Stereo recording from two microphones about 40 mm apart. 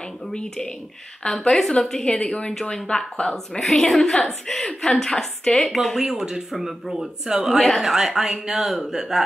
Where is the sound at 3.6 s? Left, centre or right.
Centre.